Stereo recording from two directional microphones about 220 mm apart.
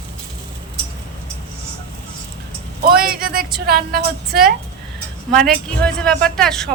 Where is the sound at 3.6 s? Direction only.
45° right (ahead or behind).